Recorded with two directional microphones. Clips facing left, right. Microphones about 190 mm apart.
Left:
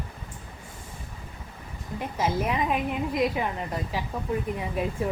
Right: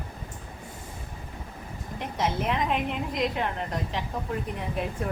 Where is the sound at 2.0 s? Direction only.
5° left (ahead or behind).